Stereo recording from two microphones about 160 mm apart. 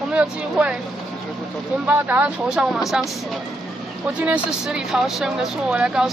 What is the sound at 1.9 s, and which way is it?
Speech, 10° right (ahead or behind).